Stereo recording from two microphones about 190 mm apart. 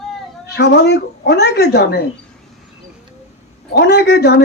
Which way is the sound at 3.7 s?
60° left (ahead or behind).